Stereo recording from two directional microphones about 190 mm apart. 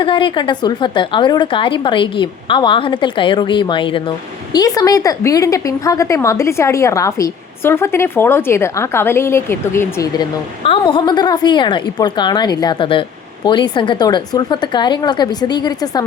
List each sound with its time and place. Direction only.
0.0 s a woman's voice: 25° left (ahead or behind)
10.6 s a woman's voice: 25° left (ahead or behind)